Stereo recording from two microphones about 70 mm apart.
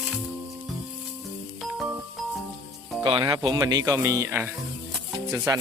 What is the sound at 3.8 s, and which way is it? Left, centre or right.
Speech, right.